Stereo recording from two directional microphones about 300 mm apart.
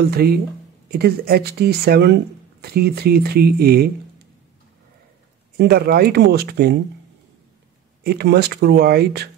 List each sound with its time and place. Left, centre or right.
0.0 s speech: right
5.6 s speech: right
8.0 s speech: right